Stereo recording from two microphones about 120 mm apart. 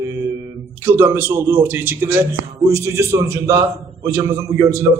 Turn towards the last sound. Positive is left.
turn(degrees=-20)  # may be behind; listen again after turning